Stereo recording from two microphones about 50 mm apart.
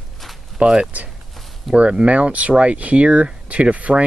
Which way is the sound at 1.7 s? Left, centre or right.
Centre.